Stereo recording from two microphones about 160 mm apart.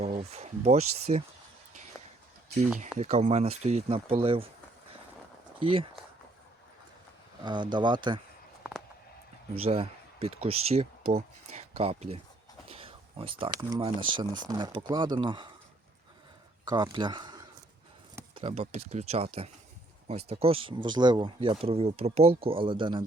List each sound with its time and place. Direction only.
0.0 s speech: 40° right (ahead or behind)
3.0 s speech: 45° right (ahead or behind)
5.5 s speech: 35° right (ahead or behind)
7.4 s speech: 30° right (ahead or behind)
9.6 s speech: 40° right (ahead or behind)
12.6 s a sound: 35° right (ahead or behind)
13.7 s speech: 30° right (ahead or behind)
16.6 s speech: 25° right (ahead or behind)
18.3 s speech: 40° right (ahead or behind)